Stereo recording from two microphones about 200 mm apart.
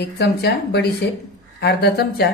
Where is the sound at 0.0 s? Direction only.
55° left (ahead or behind).